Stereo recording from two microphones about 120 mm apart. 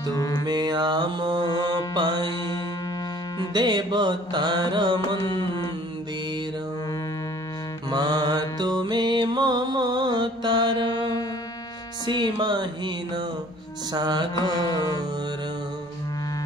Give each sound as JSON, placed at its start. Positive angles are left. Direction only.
{"t": 0.1, "sound": "mantra", "side_deg": 30}
{"t": 0.5, "sound": "music", "side_deg": -35}
{"t": 3.5, "sound": "music", "side_deg": -35}
{"t": 5.2, "sound": "music", "side_deg": 40}
{"t": 7.9, "sound": "mantra", "side_deg": -35}
{"t": 12.1, "sound": "music", "side_deg": -40}